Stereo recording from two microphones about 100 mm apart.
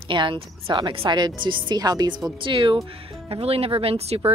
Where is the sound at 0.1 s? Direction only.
55° right (ahead or behind).